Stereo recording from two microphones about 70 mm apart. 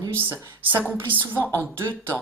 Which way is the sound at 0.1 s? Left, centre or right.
Right.